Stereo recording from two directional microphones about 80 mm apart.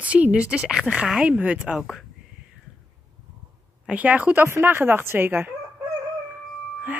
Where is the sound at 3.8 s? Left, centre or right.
Centre.